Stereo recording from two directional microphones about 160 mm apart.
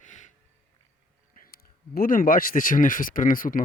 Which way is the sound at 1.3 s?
65° left (ahead or behind).